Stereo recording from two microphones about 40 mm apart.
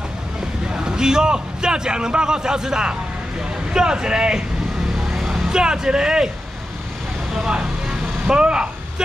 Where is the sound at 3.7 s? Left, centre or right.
Centre.